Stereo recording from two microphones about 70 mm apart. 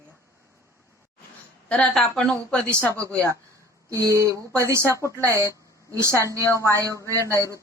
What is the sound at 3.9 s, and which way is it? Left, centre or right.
A woman's voice, right.